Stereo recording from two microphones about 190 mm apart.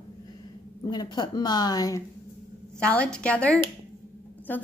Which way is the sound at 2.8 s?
5° left (ahead or behind).